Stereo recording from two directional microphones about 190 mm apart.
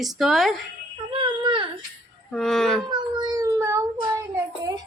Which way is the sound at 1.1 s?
25° right (ahead or behind).